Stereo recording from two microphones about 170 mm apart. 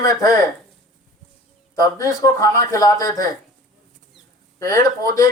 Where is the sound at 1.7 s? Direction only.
20° left (ahead or behind).